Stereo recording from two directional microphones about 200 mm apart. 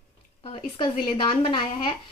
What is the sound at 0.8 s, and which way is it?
A woman's voice, 25° left (ahead or behind).